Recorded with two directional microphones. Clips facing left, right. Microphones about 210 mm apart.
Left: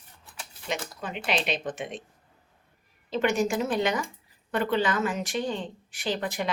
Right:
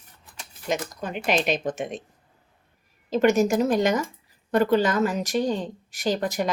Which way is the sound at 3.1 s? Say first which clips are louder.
Right 6 dB; 40° right (ahead or behind).